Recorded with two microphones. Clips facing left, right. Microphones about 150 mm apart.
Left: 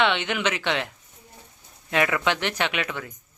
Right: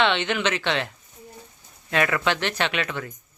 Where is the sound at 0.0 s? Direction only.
10° left (ahead or behind).